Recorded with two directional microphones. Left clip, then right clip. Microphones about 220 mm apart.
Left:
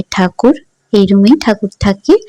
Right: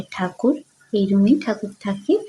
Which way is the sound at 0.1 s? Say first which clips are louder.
Left 11 dB; 40° left (ahead or behind).